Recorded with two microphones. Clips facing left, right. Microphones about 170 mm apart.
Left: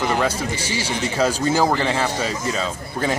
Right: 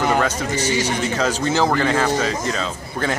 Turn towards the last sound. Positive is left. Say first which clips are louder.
# even
turn(degrees=10)  # may be behind; listen again after turning